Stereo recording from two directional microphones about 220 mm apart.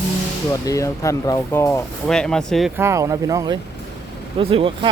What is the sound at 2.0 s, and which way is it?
Speech, 5° left (ahead or behind).